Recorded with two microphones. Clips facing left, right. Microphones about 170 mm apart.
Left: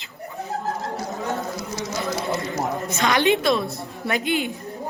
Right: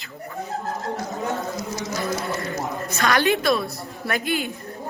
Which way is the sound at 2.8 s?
20° left (ahead or behind).